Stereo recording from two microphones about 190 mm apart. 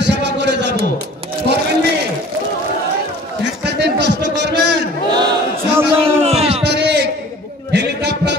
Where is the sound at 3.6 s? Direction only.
60° right (ahead or behind).